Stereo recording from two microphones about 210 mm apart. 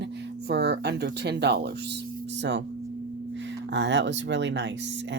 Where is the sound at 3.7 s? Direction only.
55° right (ahead or behind).